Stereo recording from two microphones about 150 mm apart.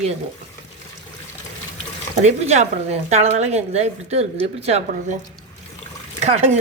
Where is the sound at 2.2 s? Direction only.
45° right (ahead or behind).